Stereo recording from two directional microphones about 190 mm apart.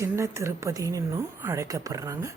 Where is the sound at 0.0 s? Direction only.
15° right (ahead or behind).